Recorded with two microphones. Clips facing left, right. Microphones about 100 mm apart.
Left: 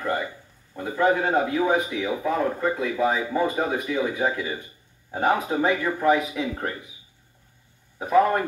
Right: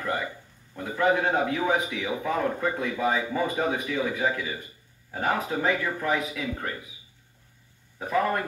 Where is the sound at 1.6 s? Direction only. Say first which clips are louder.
Left 3 dB; 15° left (ahead or behind).